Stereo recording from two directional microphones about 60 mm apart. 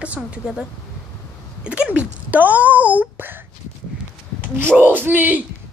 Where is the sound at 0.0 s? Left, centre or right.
Right.